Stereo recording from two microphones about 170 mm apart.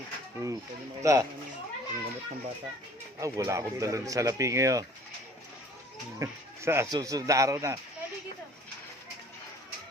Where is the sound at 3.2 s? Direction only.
20° right (ahead or behind).